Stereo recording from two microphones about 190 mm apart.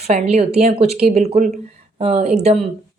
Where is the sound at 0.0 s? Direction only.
35° right (ahead or behind).